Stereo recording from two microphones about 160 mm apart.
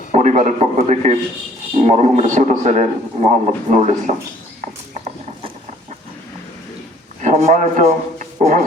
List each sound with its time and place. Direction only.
0.1 s a man's voice: 45° right (ahead or behind)
4.6 s clip-clop: 45° right (ahead or behind)
7.2 s a man's voice: 50° right (ahead or behind)